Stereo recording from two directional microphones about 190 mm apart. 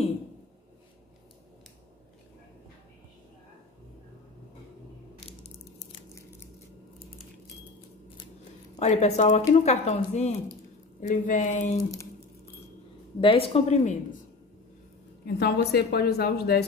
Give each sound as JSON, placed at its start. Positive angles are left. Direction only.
{"t": 5.2, "sound": "crushing", "side_deg": 35}
{"t": 8.7, "sound": "speech", "side_deg": 35}
{"t": 13.2, "sound": "speech", "side_deg": 30}
{"t": 15.2, "sound": "a woman's voice", "side_deg": 60}